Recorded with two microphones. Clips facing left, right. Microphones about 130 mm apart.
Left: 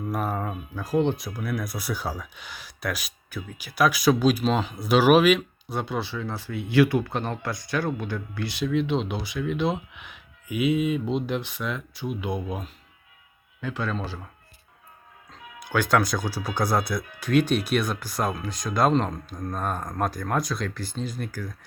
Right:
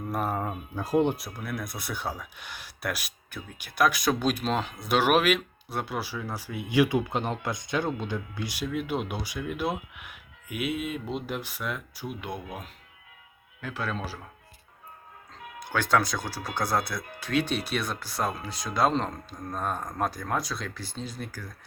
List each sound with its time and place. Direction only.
0.1 s speech: centre (ahead or behind)
0.4 s speech: 20° right (ahead or behind)
1.0 s speech: 5° right (ahead or behind)
13.6 s speech: 5° right (ahead or behind)
15.7 s speech: centre (ahead or behind)